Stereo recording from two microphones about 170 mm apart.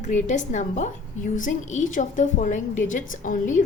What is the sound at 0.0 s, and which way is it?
A woman's voice, 45° left (ahead or behind).